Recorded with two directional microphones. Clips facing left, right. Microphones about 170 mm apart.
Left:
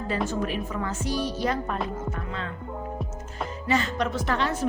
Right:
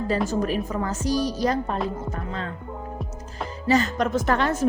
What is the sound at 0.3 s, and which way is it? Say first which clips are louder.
Speech: right 4 dB; 40° right (ahead or behind).